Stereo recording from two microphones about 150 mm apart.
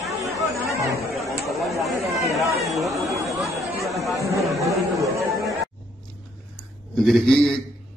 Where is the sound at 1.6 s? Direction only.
Centre (ahead or behind).